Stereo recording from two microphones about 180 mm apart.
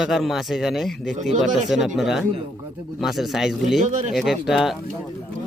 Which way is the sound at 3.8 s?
45° right (ahead or behind).